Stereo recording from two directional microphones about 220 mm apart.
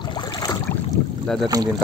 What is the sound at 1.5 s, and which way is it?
Speech, 15° right (ahead or behind).